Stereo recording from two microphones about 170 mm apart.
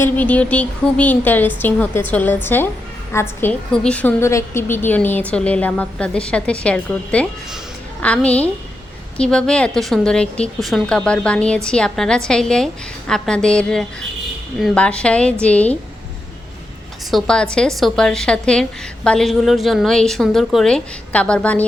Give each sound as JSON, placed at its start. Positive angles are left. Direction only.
{"t": 0.0, "sound": "a woman's voice", "side_deg": 10}
{"t": 17.1, "sound": "a woman's voice", "side_deg": 0}